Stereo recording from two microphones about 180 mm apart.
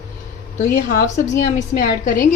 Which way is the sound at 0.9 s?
45° left (ahead or behind).